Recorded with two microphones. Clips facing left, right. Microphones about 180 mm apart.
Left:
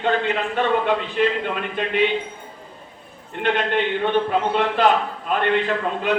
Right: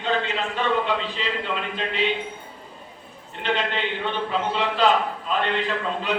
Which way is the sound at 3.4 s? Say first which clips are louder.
Left 5 dB; 55° left (ahead or behind).